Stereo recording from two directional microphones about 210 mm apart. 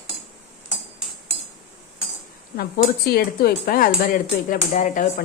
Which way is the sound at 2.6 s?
45° left (ahead or behind).